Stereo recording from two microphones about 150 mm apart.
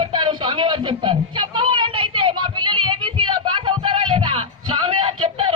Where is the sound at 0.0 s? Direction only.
30° right (ahead or behind).